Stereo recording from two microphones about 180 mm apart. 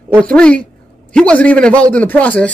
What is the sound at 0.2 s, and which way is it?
A man's voice, 5° left (ahead or behind).